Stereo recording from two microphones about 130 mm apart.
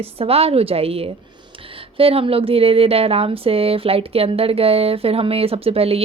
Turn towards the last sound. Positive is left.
turn(degrees=-50)  # may be behind; listen again after turning